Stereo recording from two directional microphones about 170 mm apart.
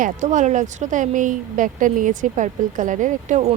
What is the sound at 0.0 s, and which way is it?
Speech, 45° right (ahead or behind).